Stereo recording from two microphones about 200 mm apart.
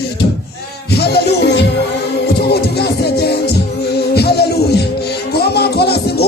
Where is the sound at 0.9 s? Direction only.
55° left (ahead or behind).